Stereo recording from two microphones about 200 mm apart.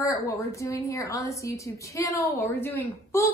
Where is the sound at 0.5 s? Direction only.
15° left (ahead or behind).